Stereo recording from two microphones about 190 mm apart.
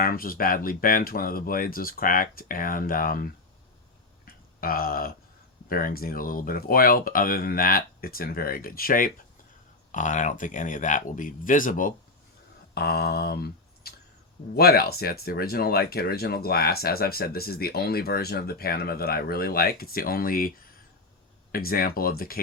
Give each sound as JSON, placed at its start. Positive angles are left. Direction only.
{"t": 0.0, "sound": "speech", "side_deg": 50}
{"t": 4.3, "sound": "a sound", "side_deg": 50}
{"t": 5.6, "sound": "speech", "side_deg": 50}
{"t": 12.7, "sound": "speech", "side_deg": 55}
{"t": 21.5, "sound": "speech", "side_deg": 50}